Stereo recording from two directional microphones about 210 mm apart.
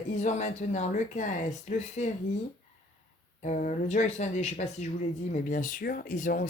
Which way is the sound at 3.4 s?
35° left (ahead or behind).